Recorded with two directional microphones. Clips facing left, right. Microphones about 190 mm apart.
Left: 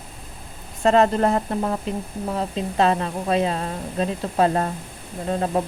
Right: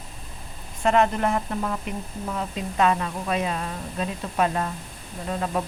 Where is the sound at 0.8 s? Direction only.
35° left (ahead or behind).